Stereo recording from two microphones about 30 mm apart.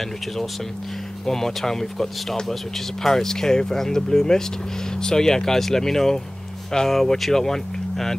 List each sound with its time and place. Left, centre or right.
1.2 s speech: centre